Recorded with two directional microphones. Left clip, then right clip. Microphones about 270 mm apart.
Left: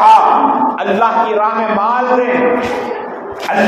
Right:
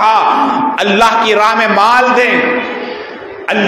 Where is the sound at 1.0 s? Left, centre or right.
Right.